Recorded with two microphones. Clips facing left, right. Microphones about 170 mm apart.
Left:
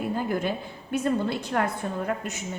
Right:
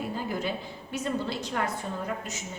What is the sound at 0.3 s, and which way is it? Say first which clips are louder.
A woman's voice: left 4 dB; 55° left (ahead or behind).